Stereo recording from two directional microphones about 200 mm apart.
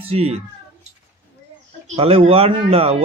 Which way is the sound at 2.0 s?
30° right (ahead or behind).